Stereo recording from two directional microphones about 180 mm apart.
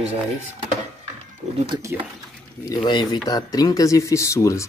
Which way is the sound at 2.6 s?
25° left (ahead or behind).